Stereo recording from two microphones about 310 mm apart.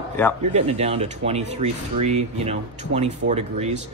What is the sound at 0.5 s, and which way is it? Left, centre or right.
Speech, centre.